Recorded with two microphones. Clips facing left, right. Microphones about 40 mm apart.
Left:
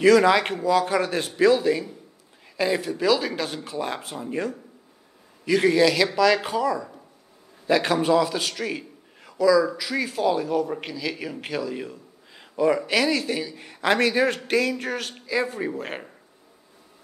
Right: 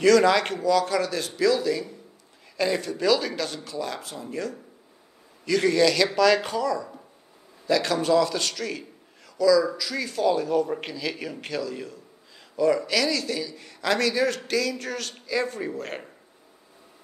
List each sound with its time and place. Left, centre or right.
0.0 s a man's voice: centre
2.5 s a man's voice: centre
5.4 s a man's voice: centre